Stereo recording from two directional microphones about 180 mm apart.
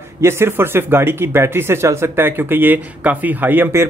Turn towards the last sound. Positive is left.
turn(degrees=-10)  # may be behind; listen again after turning